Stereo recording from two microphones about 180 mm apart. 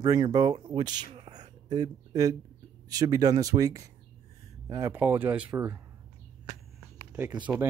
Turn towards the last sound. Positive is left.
turn(degrees=-15)  # may be behind; listen again after turning